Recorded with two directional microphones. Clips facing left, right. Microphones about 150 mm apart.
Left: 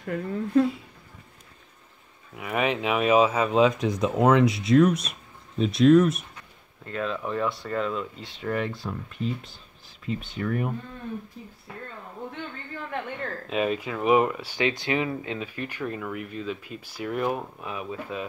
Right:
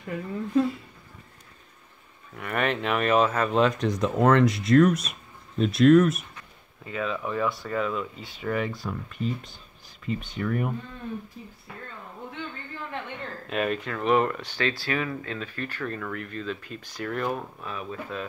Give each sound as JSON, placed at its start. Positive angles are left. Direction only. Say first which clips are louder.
{"t": 0.0, "sound": "speech", "louder": "left 3 dB", "side_deg": 60}
{"t": 2.3, "sound": "speech", "louder": "left 1 dB", "side_deg": 5}
{"t": 13.5, "sound": "speech", "louder": "left 1 dB", "side_deg": 0}